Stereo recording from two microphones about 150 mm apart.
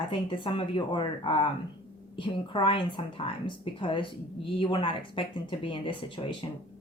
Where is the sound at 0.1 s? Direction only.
35° left (ahead or behind).